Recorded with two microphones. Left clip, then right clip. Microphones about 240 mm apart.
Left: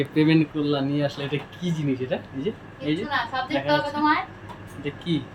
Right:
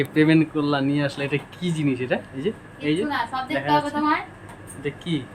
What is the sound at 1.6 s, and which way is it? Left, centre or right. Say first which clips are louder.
Speech: right 3 dB; right.